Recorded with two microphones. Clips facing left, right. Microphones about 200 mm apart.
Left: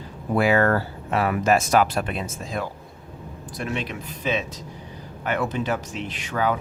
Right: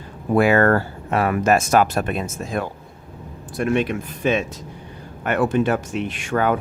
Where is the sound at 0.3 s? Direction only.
50° right (ahead or behind).